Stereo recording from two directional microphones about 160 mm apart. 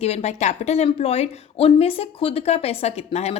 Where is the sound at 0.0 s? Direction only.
40° left (ahead or behind).